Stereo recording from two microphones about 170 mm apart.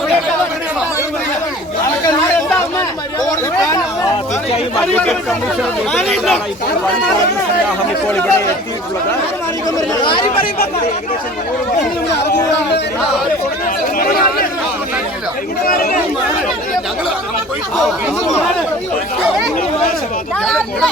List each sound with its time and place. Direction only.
3.2 s chatter: 20° left (ahead or behind)
6.0 s speech: centre (ahead or behind)
8.1 s speech: 15° left (ahead or behind)
9.9 s speech: 30° left (ahead or behind)
14.0 s speech: 60° left (ahead or behind)
15.6 s speech: 60° left (ahead or behind)
20.4 s speech: centre (ahead or behind)